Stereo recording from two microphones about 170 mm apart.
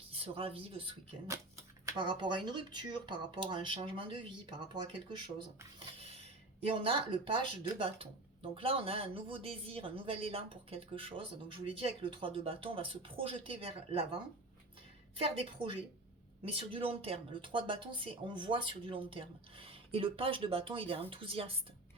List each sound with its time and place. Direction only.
0.1 s speech: 35° right (ahead or behind)
6.7 s speech: 30° right (ahead or behind)
15.2 s speech: 35° right (ahead or behind)